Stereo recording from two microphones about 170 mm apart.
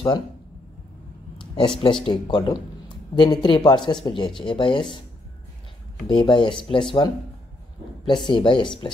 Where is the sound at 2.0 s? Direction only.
30° left (ahead or behind).